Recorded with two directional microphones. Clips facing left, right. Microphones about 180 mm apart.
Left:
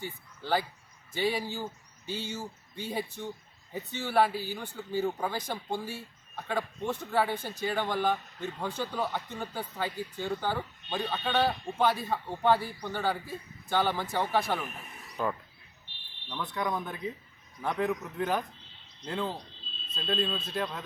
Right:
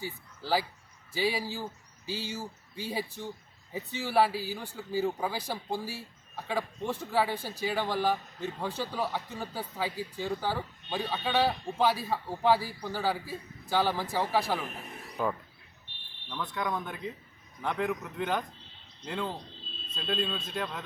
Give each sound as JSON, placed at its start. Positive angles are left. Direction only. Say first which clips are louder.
{"t": 0.0, "sound": "a man's voice", "louder": "even", "side_deg": -5}
{"t": 16.4, "sound": "a man's voice", "louder": "left 1 dB", "side_deg": 5}